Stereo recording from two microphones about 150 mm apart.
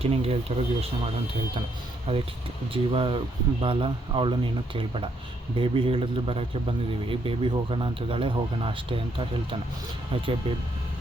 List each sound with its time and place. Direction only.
0.0 s speech: 40° right (ahead or behind)